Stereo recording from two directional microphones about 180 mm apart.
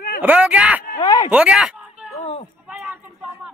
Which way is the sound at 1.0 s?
25° left (ahead or behind).